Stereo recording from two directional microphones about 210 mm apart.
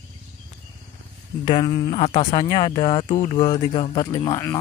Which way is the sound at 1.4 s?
20° left (ahead or behind).